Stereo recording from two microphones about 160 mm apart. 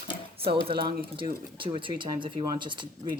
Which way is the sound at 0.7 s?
30° right (ahead or behind).